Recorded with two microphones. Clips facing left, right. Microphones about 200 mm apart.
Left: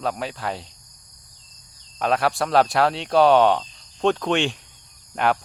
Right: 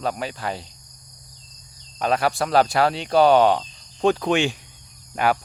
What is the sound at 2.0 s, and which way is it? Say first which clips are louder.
Speech: even; centre (ahead or behind).